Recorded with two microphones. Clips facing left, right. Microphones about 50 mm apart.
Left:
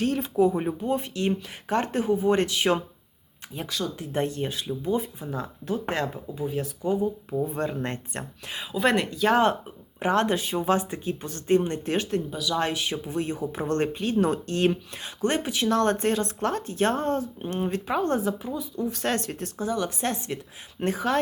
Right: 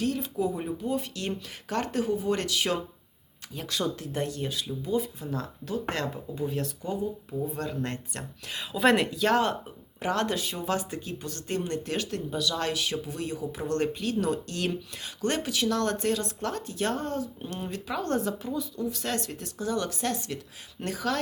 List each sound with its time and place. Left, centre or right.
0.0 s speech: left
3.9 s speech: left
6.2 s speech: centre
6.8 s speech: left
8.5 s a woman's voice: centre
10.0 s speech: left
18.9 s speech: left
19.6 s speech: centre
20.0 s speech: left